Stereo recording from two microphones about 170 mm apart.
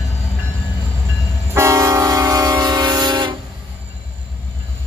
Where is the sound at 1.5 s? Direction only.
15° right (ahead or behind).